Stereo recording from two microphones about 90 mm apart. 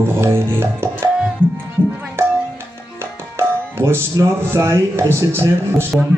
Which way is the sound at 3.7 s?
30° right (ahead or behind).